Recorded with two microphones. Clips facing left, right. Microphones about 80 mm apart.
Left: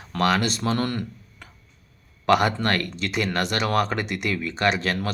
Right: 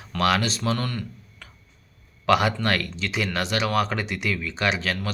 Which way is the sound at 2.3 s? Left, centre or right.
Centre.